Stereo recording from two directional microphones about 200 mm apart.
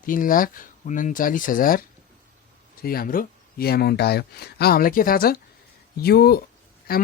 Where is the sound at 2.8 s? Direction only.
50° left (ahead or behind).